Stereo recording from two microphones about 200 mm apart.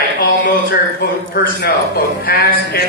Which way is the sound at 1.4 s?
45° left (ahead or behind).